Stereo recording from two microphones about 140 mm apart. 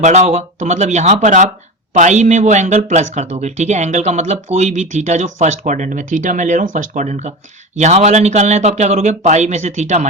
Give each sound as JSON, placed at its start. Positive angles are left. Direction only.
{"t": 0.0, "sound": "speech", "side_deg": -55}